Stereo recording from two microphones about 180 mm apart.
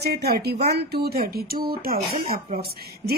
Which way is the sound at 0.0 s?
60° right (ahead or behind).